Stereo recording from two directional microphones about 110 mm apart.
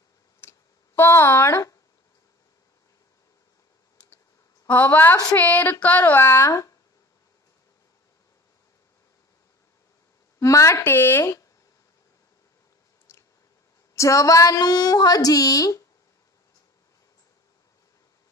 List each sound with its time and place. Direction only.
0.4 s a sound: 20° left (ahead or behind)
4.6 s speech: 15° left (ahead or behind)
10.4 s a woman's voice: 30° left (ahead or behind)
13.1 s chewing: 25° left (ahead or behind)
13.9 s a woman's voice: 30° left (ahead or behind)